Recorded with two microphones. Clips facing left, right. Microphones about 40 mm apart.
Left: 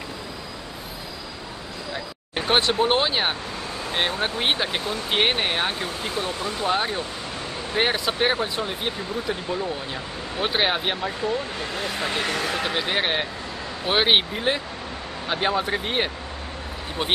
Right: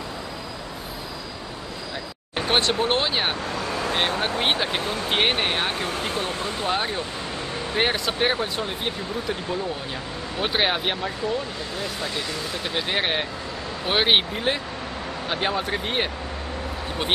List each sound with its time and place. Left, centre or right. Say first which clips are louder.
2.3 s speech: left 1 dB; centre
5.8 s speech: right 1 dB; right
6.7 s speech: left 2 dB; centre
12.0 s speech: left 4 dB; left
12.7 s speech: right 3 dB; centre